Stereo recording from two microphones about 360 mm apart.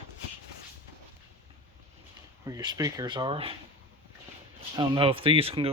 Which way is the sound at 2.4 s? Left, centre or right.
Centre.